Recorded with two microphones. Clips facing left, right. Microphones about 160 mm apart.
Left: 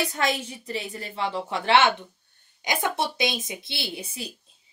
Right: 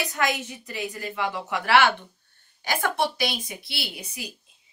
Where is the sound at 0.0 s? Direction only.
30° left (ahead or behind).